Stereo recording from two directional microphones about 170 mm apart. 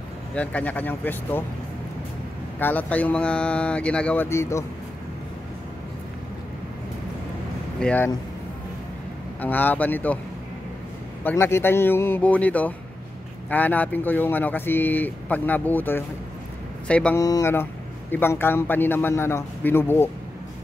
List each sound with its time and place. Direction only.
0.3 s speech: 5° left (ahead or behind)
2.6 s speech: 10° left (ahead or behind)
7.8 s speech: 10° left (ahead or behind)
9.4 s speech: 10° left (ahead or behind)
11.2 s speech: 15° left (ahead or behind)
17.2 s speech: 20° left (ahead or behind)